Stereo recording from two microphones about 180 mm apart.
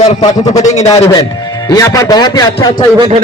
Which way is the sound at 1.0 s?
25° left (ahead or behind).